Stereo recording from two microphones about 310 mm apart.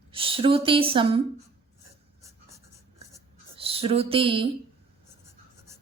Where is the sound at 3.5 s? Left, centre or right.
Centre.